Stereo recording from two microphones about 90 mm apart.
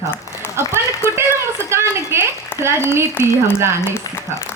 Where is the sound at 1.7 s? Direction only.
30° right (ahead or behind).